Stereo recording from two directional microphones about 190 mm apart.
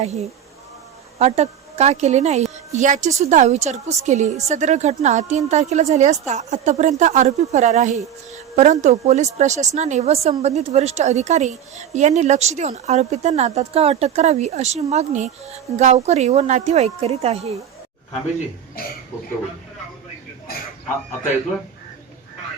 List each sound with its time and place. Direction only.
0.0 s a woman's voice: 35° right (ahead or behind)